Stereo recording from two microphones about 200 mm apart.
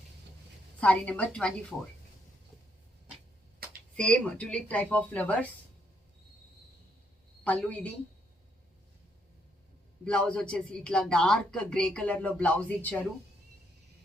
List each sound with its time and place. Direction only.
0.8 s speech: 5° left (ahead or behind)
3.9 s a woman's voice: 5° left (ahead or behind)
7.4 s a woman's voice: 5° left (ahead or behind)
10.1 s speech: 5° left (ahead or behind)